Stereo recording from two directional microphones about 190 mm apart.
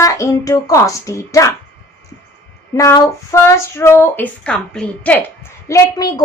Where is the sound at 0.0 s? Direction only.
15° left (ahead or behind).